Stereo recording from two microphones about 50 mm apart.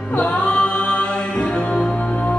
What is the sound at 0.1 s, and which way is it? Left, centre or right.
Music, left.